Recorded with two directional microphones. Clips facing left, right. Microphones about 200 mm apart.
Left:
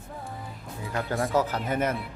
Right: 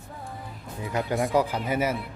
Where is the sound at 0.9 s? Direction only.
15° right (ahead or behind).